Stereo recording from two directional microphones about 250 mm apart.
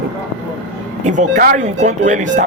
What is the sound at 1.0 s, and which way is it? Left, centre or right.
Speech, right.